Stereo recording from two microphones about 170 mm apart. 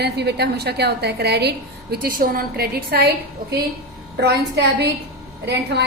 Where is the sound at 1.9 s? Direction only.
60° right (ahead or behind).